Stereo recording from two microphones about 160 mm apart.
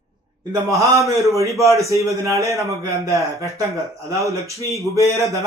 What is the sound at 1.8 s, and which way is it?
Speech, 20° right (ahead or behind).